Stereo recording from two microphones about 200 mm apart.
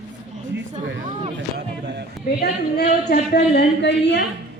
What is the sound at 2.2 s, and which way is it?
A woman's voice, 55° left (ahead or behind).